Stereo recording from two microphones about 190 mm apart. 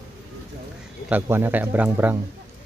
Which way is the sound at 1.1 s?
10° right (ahead or behind).